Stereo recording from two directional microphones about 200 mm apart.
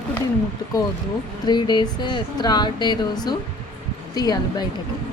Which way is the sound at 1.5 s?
20° left (ahead or behind).